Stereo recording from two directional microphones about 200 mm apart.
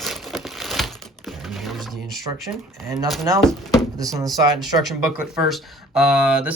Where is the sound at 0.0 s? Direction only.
Centre (ahead or behind).